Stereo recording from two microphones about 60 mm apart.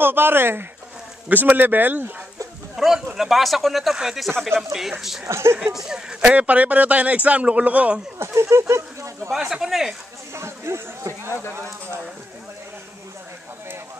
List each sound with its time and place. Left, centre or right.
0.0 s speech: right
2.7 s speech: centre
4.3 s speech: centre
5.2 s speech: right
5.8 s speech: centre
6.3 s speech: right
8.4 s speech: right
9.3 s speech: centre
10.3 s speech: right